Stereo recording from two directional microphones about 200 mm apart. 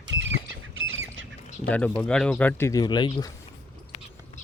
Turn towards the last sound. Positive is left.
turn(degrees=20)  # may be behind; listen again after turning